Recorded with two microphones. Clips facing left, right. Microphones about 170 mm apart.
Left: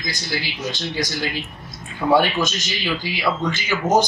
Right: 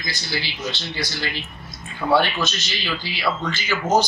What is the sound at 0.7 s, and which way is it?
Speech, 15° left (ahead or behind).